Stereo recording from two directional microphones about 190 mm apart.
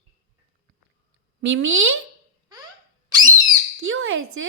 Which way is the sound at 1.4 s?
85° right.